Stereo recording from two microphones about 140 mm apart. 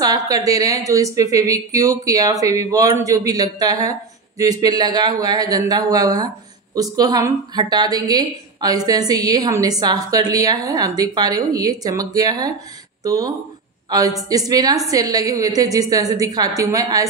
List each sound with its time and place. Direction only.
0.0 s a woman's voice: 25° right (ahead or behind)